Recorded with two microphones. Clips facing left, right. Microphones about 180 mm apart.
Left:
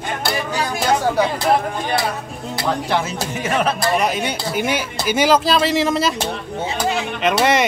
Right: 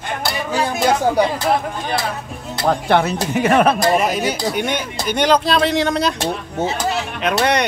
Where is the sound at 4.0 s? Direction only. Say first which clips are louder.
Right 2 dB; centre (ahead or behind).